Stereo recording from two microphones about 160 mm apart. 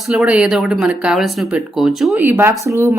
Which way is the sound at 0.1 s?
5° right (ahead or behind).